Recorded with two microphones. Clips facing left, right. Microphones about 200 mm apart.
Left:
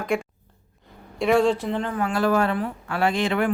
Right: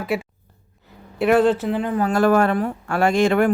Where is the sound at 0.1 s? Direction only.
5° right (ahead or behind).